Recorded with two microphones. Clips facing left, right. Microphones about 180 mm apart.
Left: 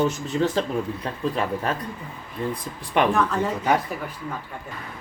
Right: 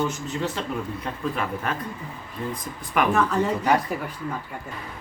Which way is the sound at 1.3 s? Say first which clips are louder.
Left 4 dB; 35° left (ahead or behind).